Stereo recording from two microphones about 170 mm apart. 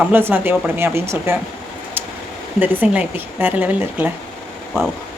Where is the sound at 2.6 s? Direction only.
10° right (ahead or behind).